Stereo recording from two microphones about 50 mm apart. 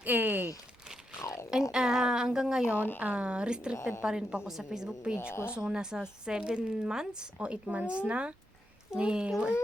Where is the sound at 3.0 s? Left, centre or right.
Right.